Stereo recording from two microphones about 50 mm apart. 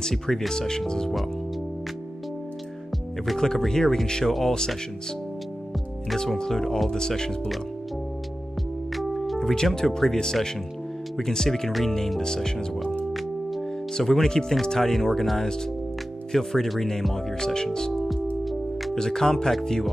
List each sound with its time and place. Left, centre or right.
0.0 s speech: centre
3.3 s speech: centre
6.1 s speech: centre
8.9 s speech: centre
13.1 s music: centre
13.9 s speech: centre
18.4 s music: centre
18.9 s speech: centre